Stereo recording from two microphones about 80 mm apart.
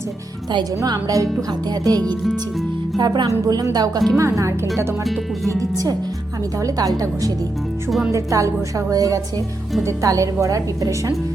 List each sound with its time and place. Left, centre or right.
0.9 s music: right
3.0 s speech: right
3.4 s music: right
4.2 s speech: right
5.5 s music: right
7.9 s speech: centre
8.1 s music: right